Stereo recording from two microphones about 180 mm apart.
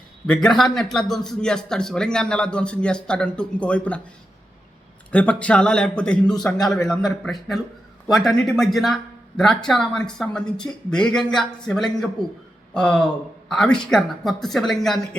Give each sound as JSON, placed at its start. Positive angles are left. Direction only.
{"t": 0.3, "sound": "a man's voice", "side_deg": 0}
{"t": 5.1, "sound": "a man's voice", "side_deg": 5}